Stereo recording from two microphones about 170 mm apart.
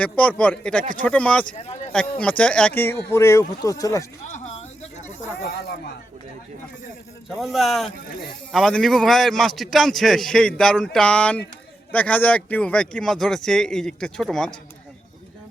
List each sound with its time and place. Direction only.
0.0 s speech: 10° left (ahead or behind)
4.4 s a sound: 40° left (ahead or behind)
7.3 s speech: centre (ahead or behind)